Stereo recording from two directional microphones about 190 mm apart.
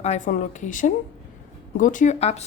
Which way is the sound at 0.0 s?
40° left (ahead or behind).